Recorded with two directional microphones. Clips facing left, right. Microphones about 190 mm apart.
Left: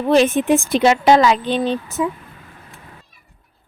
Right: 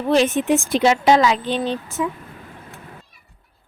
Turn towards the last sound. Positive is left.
turn(degrees=30)  # may be behind; listen again after turning